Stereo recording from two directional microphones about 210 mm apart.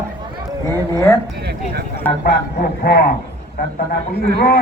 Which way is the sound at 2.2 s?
50° left (ahead or behind).